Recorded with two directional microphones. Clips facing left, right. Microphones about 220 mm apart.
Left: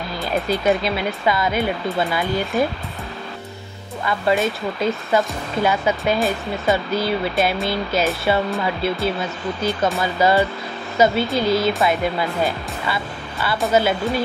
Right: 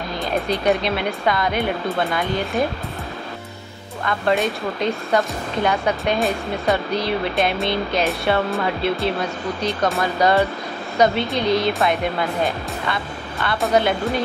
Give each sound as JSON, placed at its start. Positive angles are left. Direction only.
{"t": 0.2, "sound": "speech", "side_deg": 0}
{"t": 4.0, "sound": "speech", "side_deg": 5}